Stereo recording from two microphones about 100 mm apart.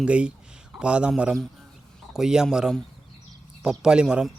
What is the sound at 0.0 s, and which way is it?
A man's voice, 10° right (ahead or behind).